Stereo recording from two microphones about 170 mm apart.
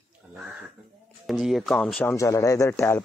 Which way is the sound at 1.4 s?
Centre (ahead or behind).